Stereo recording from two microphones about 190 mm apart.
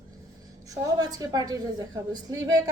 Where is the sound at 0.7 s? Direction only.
20° right (ahead or behind).